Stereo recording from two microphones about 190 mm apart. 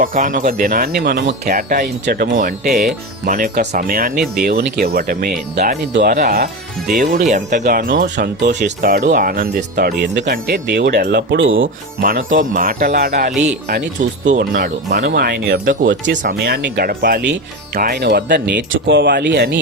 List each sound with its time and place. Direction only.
0.0 s speech: 45° right (ahead or behind)
1.5 s speech: 45° right (ahead or behind); by 10.2 s 60° right (ahead or behind)
10.2 s speech: 45° right (ahead or behind)
10.7 s speech: 65° right (ahead or behind); by 11.7 s 90° right
11.9 s speech: 45° right (ahead or behind)
14.3 s speech: 55° right (ahead or behind)
15.0 s speech: 60° right (ahead or behind)
18.7 s speech: 75° right (ahead or behind)